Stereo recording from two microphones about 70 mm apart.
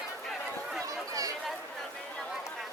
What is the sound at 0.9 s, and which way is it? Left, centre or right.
Chatter, right.